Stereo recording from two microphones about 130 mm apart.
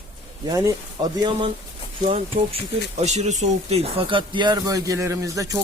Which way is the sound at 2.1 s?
50° right (ahead or behind).